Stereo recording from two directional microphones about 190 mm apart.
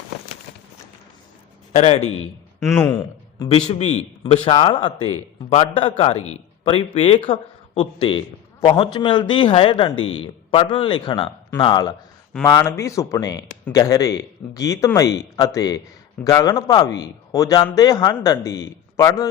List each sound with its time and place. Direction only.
1.7 s speech: 35° left (ahead or behind)
2.0 s a man's voice: 90° left
2.9 s a man's voice: 25° left (ahead or behind)
9.9 s a man's voice: 90° left
10.5 s a man's voice: 25° left (ahead or behind)